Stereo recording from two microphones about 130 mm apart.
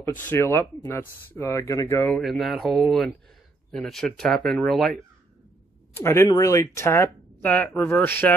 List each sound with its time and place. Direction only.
0.2 s speech: 20° left (ahead or behind)
2.0 s speech: centre (ahead or behind)
5.9 s speech: 20° left (ahead or behind)